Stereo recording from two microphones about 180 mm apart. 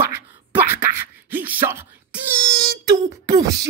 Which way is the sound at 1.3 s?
10° right (ahead or behind).